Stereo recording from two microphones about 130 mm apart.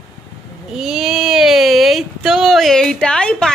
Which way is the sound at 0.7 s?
5° right (ahead or behind).